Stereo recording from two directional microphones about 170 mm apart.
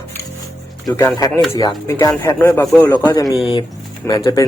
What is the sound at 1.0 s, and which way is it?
Speech, 20° left (ahead or behind).